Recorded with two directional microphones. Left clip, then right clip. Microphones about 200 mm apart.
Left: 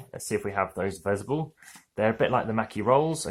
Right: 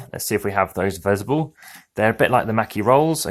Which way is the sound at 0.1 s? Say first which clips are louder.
Right 7 dB; 40° right (ahead or behind).